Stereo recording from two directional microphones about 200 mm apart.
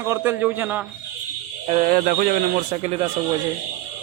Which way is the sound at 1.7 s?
40° right (ahead or behind).